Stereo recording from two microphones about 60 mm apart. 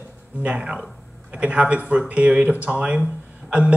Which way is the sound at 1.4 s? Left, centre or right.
Centre.